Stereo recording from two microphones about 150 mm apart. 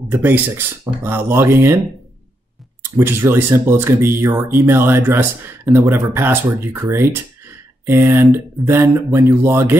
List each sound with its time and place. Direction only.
0.1 s speech: 15° right (ahead or behind)
2.8 s speech: 15° right (ahead or behind)